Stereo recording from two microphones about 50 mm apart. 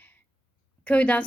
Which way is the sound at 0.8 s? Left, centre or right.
Left.